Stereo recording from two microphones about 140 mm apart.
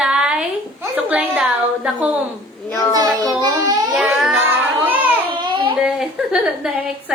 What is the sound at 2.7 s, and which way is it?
Speech, 25° left (ahead or behind).